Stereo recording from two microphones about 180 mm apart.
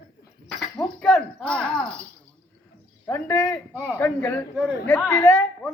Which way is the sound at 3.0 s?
10° left (ahead or behind).